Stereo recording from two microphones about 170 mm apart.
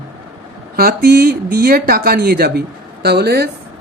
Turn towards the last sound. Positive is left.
turn(degrees=-70)  # may be behind; listen again after turning